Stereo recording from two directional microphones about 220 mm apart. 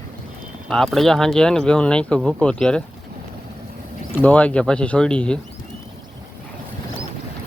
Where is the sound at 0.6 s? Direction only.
Centre (ahead or behind).